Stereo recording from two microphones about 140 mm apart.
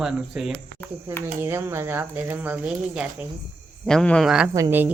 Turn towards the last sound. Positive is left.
turn(degrees=-20)  # may be behind; listen again after turning